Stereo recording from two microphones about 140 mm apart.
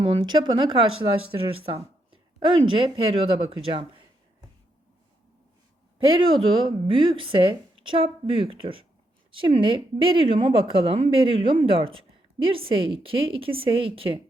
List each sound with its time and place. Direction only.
0.0 s a woman's voice: 35° right (ahead or behind)
6.1 s a woman's voice: 40° right (ahead or behind)